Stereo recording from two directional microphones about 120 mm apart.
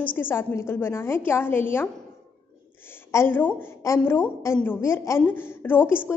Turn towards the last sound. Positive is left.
turn(degrees=20)  # may be behind; listen again after turning